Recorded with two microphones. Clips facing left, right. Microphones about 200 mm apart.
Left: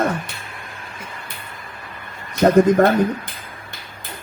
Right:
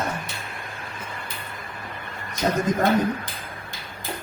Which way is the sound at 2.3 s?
60° left (ahead or behind).